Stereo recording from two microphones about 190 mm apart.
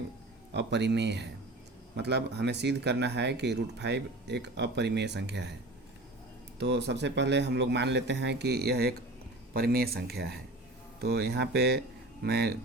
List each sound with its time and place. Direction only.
0.5 s speech: 65° right (ahead or behind)
6.6 s speech: 65° right (ahead or behind)